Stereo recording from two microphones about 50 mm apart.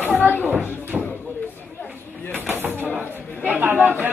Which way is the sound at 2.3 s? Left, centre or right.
Right.